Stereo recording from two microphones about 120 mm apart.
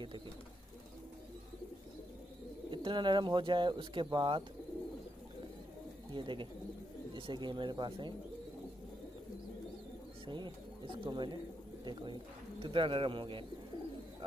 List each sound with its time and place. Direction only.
2.7 s speech: 40° right (ahead or behind)
6.1 s speech: 45° right (ahead or behind)
10.2 s speech: 40° right (ahead or behind)